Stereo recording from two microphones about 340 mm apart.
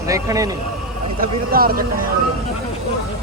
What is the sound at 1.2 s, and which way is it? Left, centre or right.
Speech, right.